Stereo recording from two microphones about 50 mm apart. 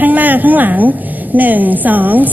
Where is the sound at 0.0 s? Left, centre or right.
Right.